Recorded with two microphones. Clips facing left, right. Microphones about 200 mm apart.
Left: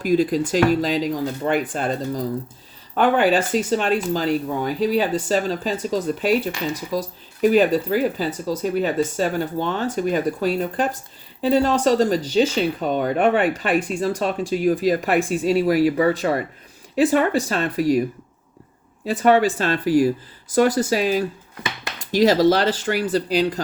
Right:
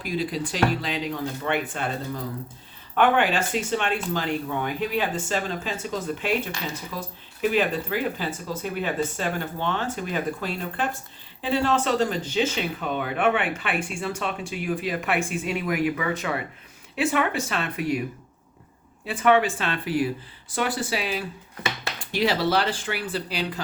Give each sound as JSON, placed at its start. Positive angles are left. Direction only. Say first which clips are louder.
{"t": 0.0, "sound": "speech", "louder": "left 9 dB", "side_deg": 45}
{"t": 19.0, "sound": "speech", "louder": "left 4 dB", "side_deg": 40}